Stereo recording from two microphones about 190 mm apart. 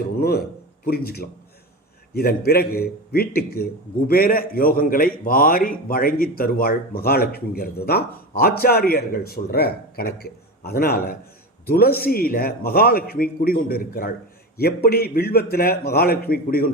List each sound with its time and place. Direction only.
0.2 s a man's voice: 55° left (ahead or behind)